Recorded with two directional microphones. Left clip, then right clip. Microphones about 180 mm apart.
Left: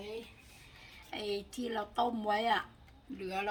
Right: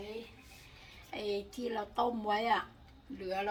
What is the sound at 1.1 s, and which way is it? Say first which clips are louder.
Speech: right 1 dB; 35° left (ahead or behind).